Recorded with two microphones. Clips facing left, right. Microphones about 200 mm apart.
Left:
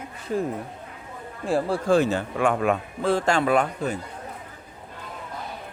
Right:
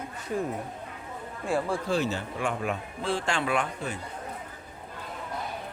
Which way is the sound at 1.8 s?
50° left (ahead or behind).